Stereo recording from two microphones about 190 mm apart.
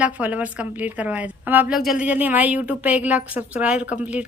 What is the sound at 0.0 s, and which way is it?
A woman's voice, 5° right (ahead or behind).